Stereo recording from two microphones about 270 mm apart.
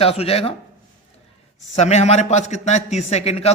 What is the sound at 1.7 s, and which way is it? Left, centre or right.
A man's voice, left.